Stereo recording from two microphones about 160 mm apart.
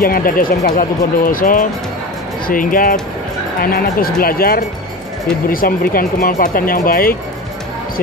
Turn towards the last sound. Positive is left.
turn(degrees=65)  # may be behind; listen again after turning